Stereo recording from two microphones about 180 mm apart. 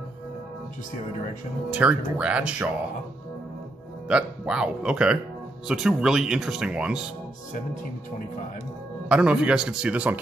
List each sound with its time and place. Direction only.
1.7 s speech: 5° right (ahead or behind)
4.1 s speech: 5° right (ahead or behind)
9.1 s speech: 5° right (ahead or behind)